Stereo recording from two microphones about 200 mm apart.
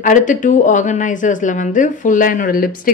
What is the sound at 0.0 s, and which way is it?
Speech, 40° left (ahead or behind).